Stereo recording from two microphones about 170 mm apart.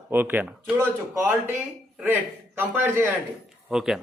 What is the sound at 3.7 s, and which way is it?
Speech, 5° right (ahead or behind).